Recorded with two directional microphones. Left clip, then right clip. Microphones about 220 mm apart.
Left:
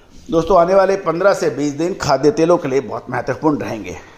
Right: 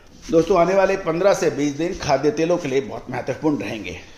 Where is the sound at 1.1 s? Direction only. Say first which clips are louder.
Left 3 dB; 15° left (ahead or behind).